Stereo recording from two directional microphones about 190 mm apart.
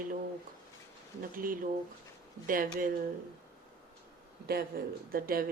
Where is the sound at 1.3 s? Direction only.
45° right (ahead or behind).